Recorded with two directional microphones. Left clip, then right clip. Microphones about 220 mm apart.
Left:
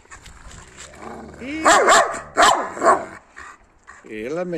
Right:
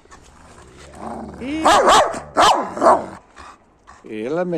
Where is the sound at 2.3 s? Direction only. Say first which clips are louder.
Right 1 dB; 50° right (ahead or behind).